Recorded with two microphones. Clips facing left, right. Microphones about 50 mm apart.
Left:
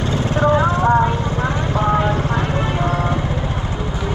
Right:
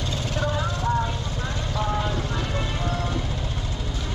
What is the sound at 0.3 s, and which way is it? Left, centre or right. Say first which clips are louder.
Vehicle: left 12 dB; left.